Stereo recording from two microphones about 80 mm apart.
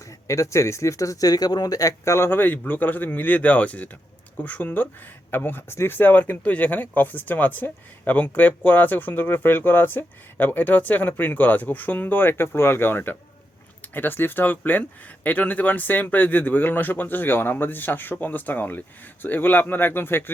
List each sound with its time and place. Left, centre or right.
0.3 s speech: left